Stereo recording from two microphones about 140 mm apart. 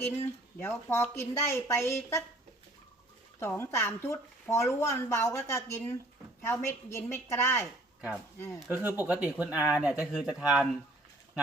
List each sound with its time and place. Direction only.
0.0 s a woman's voice: 15° left (ahead or behind)
3.4 s a woman's voice: 15° left (ahead or behind)
8.7 s speech: 15° right (ahead or behind)